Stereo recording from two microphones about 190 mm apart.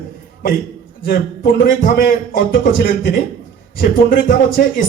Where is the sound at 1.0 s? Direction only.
55° left (ahead or behind).